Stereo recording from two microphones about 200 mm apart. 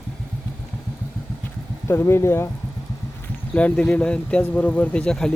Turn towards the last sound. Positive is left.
turn(degrees=5)  # may be behind; listen again after turning